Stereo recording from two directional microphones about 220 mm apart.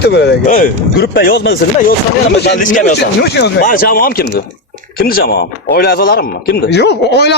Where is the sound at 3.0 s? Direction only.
50° left (ahead or behind).